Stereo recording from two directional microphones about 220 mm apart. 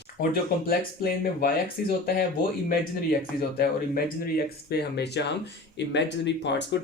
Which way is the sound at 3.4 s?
40° left (ahead or behind).